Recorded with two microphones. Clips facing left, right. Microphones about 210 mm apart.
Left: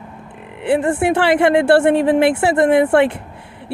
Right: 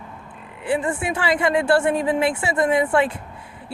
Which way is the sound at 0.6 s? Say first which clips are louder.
Left 7 dB; 70° left (ahead or behind).